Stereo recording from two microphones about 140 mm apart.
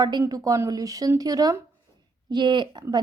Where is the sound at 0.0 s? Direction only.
30° right (ahead or behind).